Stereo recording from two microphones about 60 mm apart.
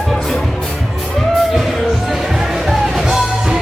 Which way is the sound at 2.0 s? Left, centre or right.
Centre.